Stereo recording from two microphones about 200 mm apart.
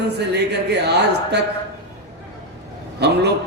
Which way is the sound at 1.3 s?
55° right (ahead or behind).